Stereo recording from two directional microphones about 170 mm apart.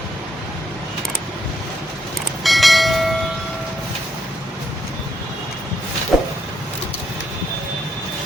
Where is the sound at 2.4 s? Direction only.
Centre (ahead or behind).